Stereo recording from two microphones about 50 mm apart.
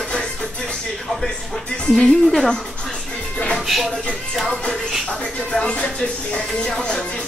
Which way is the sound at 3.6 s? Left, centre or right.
Centre.